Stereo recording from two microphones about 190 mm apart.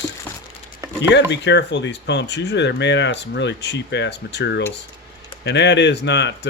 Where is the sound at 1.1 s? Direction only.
65° left (ahead or behind).